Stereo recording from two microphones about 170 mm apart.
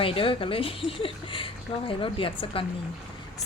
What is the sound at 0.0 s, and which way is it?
Speech, 30° left (ahead or behind).